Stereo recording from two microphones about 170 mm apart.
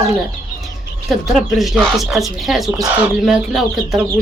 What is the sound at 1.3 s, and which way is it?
Speech, centre (ahead or behind).